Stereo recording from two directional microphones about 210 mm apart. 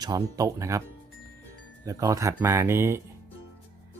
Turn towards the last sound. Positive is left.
turn(degrees=-10)  # may be behind; listen again after turning